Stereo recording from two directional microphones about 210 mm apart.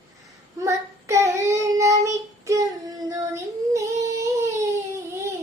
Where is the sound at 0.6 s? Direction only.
15° right (ahead or behind).